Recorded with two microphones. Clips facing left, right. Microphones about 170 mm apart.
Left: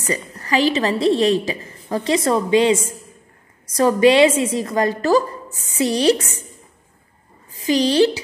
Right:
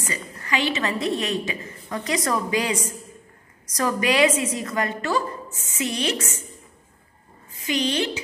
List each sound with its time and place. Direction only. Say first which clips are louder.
0.0 s a woman's voice: left 8 dB; 40° left (ahead or behind)
7.6 s a woman's voice: left 9 dB; 35° left (ahead or behind)